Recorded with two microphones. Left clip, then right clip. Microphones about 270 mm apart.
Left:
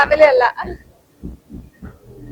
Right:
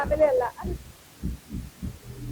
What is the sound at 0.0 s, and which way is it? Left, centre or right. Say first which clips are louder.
Speech: left 11 dB; centre.